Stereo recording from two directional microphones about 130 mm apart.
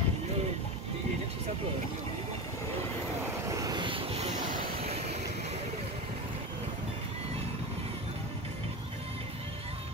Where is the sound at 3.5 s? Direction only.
30° right (ahead or behind); by 5.6 s 55° right (ahead or behind).